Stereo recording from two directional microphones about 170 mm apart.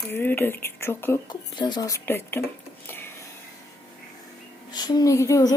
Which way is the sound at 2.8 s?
10° left (ahead or behind).